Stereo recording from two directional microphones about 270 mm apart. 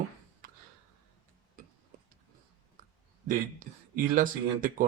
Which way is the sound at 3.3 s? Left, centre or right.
Right.